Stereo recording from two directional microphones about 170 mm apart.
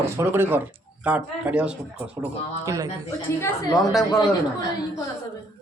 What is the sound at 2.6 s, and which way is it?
Speech, 20° right (ahead or behind).